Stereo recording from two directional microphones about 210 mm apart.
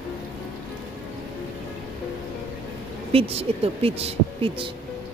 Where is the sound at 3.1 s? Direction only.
25° right (ahead or behind).